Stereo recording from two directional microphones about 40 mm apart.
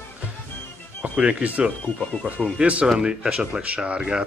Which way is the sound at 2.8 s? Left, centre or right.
Centre.